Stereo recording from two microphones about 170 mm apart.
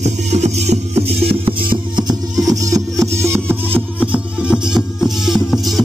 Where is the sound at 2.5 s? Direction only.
20° right (ahead or behind).